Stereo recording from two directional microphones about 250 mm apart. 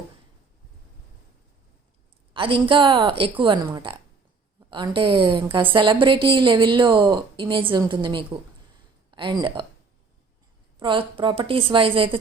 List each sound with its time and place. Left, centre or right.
2.3 s a woman's voice: right
10.8 s a woman's voice: centre